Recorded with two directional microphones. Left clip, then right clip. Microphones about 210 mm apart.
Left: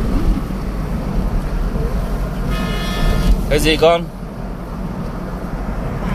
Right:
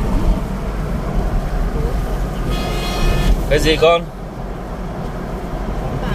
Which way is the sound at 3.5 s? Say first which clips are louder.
Even; 15° left (ahead or behind).